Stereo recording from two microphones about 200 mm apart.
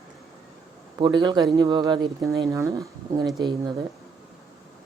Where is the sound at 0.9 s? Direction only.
20° right (ahead or behind).